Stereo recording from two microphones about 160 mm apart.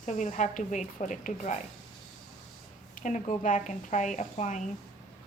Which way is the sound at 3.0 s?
50° left (ahead or behind).